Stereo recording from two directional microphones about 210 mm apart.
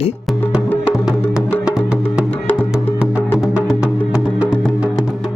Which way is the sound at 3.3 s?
Centre (ahead or behind).